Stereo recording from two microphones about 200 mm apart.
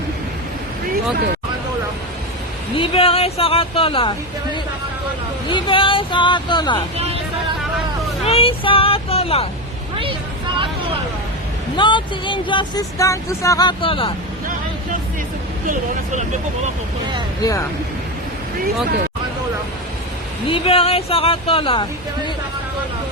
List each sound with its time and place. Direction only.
2.7 s speech: 25° left (ahead or behind)
5.5 s speech: 25° left (ahead or behind)
6.9 s hubbub: 30° right (ahead or behind)
8.2 s speech: 30° left (ahead or behind)
11.8 s speech: 25° left (ahead or behind)
20.5 s speech: 30° left (ahead or behind)